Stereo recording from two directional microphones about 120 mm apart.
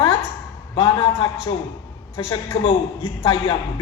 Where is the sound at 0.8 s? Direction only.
45° left (ahead or behind).